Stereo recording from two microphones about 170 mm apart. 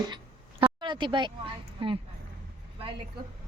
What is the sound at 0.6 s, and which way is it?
Speech, 30° right (ahead or behind).